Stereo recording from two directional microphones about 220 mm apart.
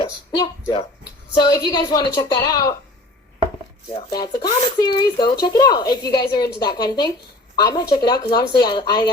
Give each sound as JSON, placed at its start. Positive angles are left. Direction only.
{"t": 0.0, "sound": "a sound", "side_deg": 20}
{"t": 1.4, "sound": "speech", "side_deg": 15}
{"t": 3.9, "sound": "a woman's voice", "side_deg": 20}